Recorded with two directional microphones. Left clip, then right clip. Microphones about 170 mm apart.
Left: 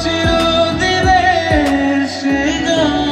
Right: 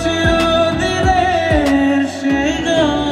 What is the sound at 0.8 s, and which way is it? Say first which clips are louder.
Music: left 3 dB; 30° left (ahead or behind).